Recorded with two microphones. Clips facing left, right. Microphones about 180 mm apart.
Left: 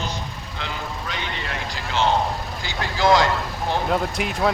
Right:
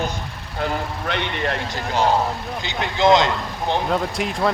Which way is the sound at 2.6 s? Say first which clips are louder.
Right 3 dB; 20° right (ahead or behind).